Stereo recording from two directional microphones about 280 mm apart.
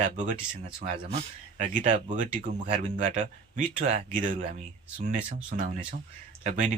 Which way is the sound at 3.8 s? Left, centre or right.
Right.